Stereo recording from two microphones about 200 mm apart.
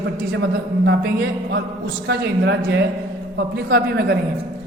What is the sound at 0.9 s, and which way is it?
Speech, 55° right (ahead or behind).